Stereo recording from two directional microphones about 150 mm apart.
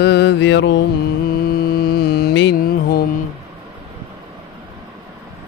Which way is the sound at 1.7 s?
90° left.